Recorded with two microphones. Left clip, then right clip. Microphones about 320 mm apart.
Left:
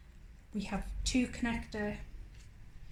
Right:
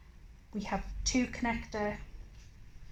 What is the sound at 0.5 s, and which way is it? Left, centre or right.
A woman's voice, right.